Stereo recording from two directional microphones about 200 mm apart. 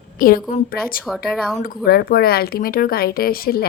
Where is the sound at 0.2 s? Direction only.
45° left (ahead or behind).